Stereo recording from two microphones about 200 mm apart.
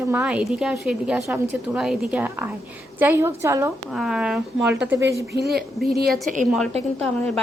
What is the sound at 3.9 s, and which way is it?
Speech, centre (ahead or behind).